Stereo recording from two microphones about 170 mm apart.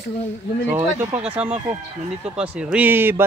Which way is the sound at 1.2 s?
5° right (ahead or behind).